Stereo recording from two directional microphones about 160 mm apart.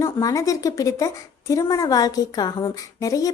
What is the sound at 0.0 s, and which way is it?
A woman's voice, 20° left (ahead or behind).